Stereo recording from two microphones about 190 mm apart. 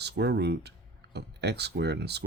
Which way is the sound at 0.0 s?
60° right (ahead or behind).